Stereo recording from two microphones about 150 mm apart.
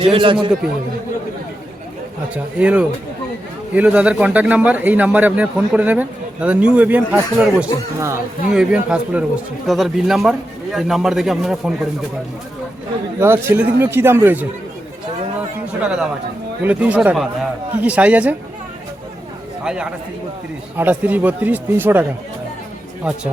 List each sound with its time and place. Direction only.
0.0 s a man's voice: 35° right (ahead or behind)
2.3 s speech: 10° right (ahead or behind)
7.9 s speech: 20° right (ahead or behind)
8.5 s a man's voice: 5° right (ahead or behind)
13.1 s speech: 15° right (ahead or behind)
15.8 s speech: 5° right (ahead or behind)
19.6 s speech: 5° right (ahead or behind)
23.1 s a man's voice: 5° right (ahead or behind)